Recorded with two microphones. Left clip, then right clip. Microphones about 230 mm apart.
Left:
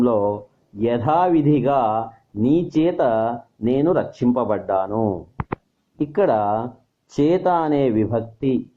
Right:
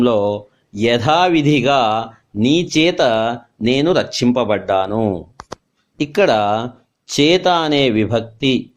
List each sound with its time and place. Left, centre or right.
0.0 s speech: right